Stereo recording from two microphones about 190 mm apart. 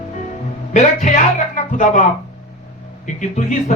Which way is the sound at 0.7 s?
40° left (ahead or behind).